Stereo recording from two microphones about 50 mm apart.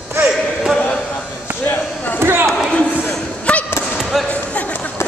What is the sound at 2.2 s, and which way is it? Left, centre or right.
Basketball bounce, right.